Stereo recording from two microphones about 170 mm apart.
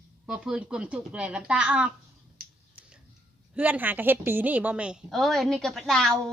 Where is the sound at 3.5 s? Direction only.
10° right (ahead or behind).